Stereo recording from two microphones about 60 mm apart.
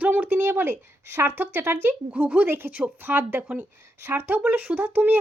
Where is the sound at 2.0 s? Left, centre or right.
Right.